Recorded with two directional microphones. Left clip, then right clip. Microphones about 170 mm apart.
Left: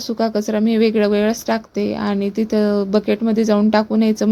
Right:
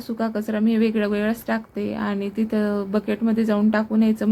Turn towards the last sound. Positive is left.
turn(degrees=40)  # may be behind; listen again after turning